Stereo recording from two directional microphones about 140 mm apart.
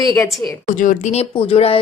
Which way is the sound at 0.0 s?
25° left (ahead or behind).